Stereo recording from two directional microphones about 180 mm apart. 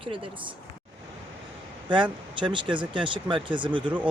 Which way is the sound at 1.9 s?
25° right (ahead or behind).